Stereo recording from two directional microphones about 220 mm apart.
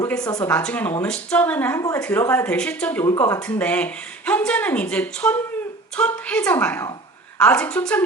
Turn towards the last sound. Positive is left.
turn(degrees=5)  # may be behind; listen again after turning